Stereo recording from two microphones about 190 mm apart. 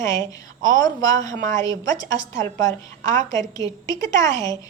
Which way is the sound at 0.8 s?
20° left (ahead or behind).